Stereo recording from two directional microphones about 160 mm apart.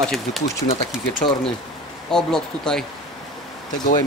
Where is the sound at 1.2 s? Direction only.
30° left (ahead or behind).